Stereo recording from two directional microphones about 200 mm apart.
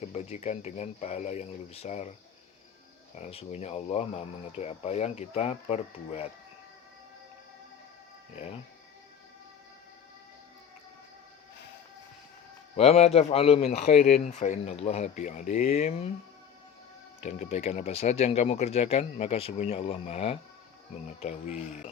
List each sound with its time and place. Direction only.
0.1 s speech: 35° left (ahead or behind)
3.2 s speech: 30° left (ahead or behind)
12.7 s speech: 30° left (ahead or behind)
17.2 s speech: 35° left (ahead or behind)